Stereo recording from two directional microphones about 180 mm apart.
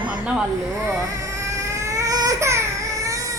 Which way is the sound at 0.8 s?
15° right (ahead or behind).